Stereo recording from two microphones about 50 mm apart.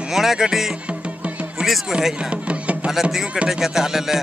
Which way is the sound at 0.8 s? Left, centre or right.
Right.